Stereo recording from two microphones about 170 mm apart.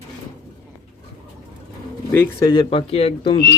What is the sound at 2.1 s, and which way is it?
Speech, 15° left (ahead or behind).